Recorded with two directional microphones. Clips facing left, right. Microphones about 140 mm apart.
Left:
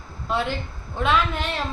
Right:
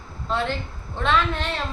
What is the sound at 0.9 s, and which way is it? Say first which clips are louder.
Speech: even; 5° left (ahead or behind).